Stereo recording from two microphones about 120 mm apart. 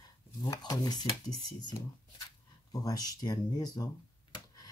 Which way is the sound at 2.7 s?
30° left (ahead or behind).